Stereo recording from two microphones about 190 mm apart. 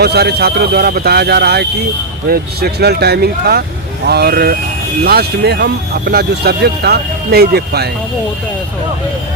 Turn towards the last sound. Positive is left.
turn(degrees=-55)  # may be behind; listen again after turning